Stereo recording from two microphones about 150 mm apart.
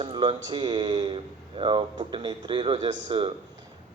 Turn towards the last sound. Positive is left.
turn(degrees=-35)  # may be behind; listen again after turning